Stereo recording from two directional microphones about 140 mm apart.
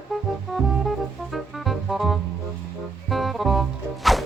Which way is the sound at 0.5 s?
Centre (ahead or behind).